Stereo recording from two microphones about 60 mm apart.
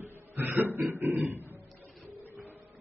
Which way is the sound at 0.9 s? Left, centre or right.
Right.